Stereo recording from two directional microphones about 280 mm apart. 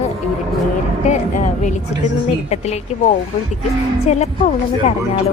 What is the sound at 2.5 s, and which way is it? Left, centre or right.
A woman's voice, left.